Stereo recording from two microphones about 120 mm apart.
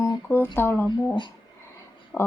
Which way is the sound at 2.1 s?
5° left (ahead or behind).